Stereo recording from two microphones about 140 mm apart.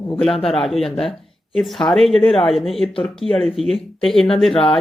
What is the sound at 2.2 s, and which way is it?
Speech, 40° left (ahead or behind).